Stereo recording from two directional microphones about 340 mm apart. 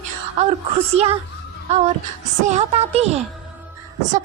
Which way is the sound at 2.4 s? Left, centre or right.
Centre.